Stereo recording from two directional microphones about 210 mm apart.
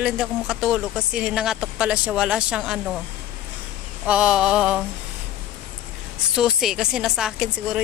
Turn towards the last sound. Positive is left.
turn(degrees=-5)  # may be behind; listen again after turning